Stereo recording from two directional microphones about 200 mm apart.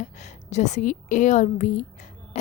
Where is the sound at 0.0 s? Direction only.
35° left (ahead or behind).